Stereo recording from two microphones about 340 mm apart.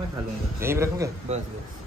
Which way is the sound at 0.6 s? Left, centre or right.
Centre.